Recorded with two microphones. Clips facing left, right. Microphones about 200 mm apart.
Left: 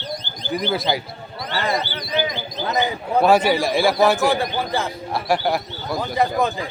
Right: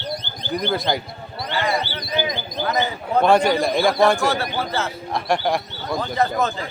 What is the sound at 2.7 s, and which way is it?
Speech, 15° left (ahead or behind).